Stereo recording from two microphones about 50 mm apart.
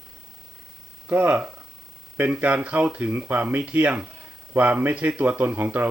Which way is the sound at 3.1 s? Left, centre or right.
Right.